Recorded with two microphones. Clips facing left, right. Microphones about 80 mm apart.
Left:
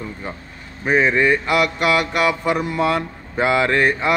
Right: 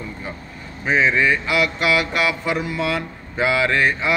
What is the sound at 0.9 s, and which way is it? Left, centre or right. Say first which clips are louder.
Mantra: left 2 dB; left.